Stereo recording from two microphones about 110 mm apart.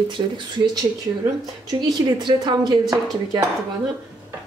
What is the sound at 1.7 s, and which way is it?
A woman's voice, 40° right (ahead or behind).